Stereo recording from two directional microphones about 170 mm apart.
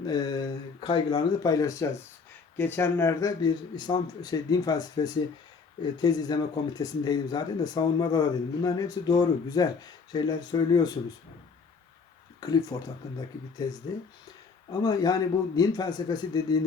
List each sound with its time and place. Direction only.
0.0 s speech: 25° left (ahead or behind)
12.4 s speech: 20° left (ahead or behind)
13.6 s speech: 20° left (ahead or behind)